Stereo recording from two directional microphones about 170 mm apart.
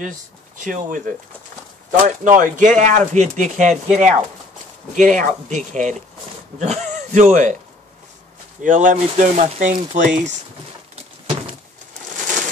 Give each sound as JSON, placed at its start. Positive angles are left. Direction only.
{"t": 0.7, "sound": "a man's voice", "side_deg": -50}
{"t": 8.6, "sound": "speech", "side_deg": -45}